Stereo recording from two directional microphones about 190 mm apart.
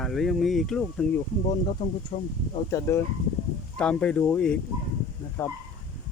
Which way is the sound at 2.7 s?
15° left (ahead or behind).